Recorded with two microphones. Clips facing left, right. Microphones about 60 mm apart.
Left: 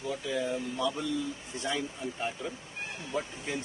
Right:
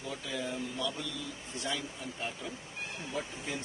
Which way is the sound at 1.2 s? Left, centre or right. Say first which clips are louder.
Left 3 dB; left.